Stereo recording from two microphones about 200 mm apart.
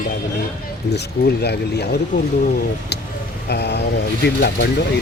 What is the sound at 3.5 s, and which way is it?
Speech, 55° left (ahead or behind).